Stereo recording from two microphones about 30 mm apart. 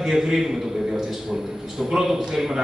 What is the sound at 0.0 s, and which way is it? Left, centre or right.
Speech, centre.